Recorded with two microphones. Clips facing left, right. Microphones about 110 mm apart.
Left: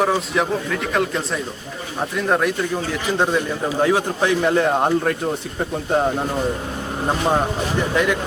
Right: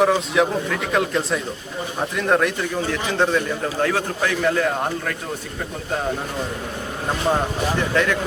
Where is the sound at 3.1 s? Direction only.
15° left (ahead or behind); by 5.1 s 30° left (ahead or behind).